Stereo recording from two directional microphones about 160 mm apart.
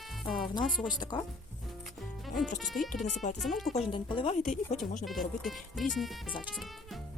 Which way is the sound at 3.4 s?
Centre (ahead or behind).